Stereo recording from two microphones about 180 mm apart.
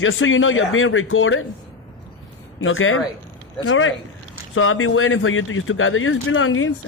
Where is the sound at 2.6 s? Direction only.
90° left.